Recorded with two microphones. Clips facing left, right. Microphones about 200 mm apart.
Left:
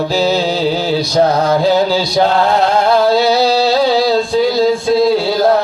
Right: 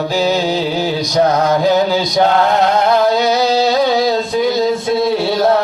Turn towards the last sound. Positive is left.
turn(degrees=25)  # may be behind; listen again after turning